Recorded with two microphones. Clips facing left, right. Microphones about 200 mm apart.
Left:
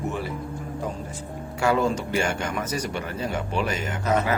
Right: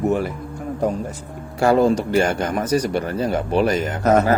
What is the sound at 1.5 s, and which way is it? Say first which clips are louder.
Speech: right 7 dB; 35° right (ahead or behind).